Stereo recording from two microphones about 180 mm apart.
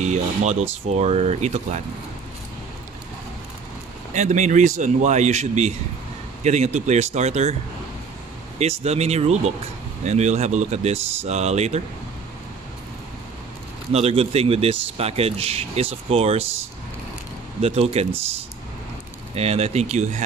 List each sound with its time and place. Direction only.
0.0 s a man's voice: 40° right (ahead or behind)
4.1 s a man's voice: 40° right (ahead or behind)
8.5 s a man's voice: 35° right (ahead or behind)
13.9 s a man's voice: 35° right (ahead or behind)
17.6 s a man's voice: 35° right (ahead or behind)
19.3 s a man's voice: 35° right (ahead or behind)